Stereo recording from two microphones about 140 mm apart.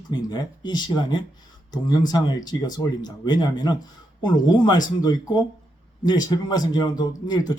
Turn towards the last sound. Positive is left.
turn(degrees=30)  # may be behind; listen again after turning